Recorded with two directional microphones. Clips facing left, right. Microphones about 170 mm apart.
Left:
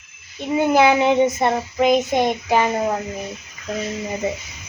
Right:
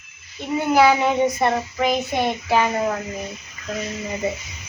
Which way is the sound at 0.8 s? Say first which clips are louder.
Left 1 dB; 20° left (ahead or behind).